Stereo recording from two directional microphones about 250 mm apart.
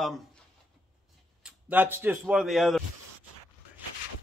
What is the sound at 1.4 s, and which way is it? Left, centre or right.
Speech, centre.